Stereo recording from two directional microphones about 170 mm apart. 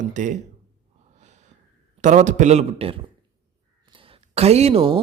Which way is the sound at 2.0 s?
45° right (ahead or behind).